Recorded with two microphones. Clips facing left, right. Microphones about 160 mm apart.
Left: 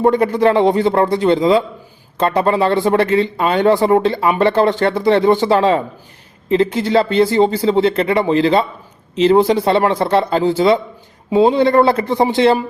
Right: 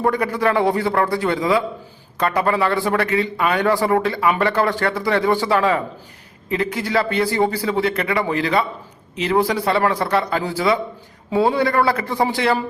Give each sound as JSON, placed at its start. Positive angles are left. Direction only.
{"t": 0.0, "sound": "speech", "side_deg": 25}